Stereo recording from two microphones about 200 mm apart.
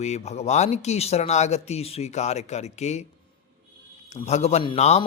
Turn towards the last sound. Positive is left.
turn(degrees=35)  # may be behind; listen again after turning